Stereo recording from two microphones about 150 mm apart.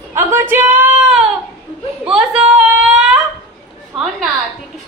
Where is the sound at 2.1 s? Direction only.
5° right (ahead or behind).